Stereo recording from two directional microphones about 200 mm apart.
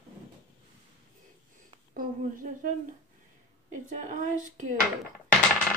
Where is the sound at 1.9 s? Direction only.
40° right (ahead or behind).